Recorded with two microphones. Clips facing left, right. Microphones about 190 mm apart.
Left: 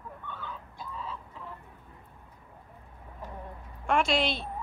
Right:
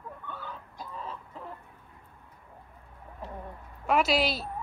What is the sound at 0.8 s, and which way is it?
Chicken, 45° right (ahead or behind).